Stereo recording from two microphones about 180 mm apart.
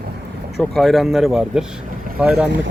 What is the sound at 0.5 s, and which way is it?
Speech, centre (ahead or behind).